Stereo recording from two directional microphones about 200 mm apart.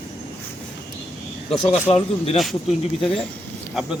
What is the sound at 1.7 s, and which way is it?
Speech, 30° left (ahead or behind).